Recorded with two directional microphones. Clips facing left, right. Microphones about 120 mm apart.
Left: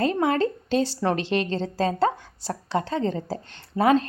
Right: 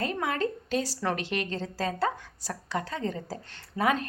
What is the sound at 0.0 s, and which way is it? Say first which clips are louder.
A woman's voice: left 7 dB; 30° left (ahead or behind).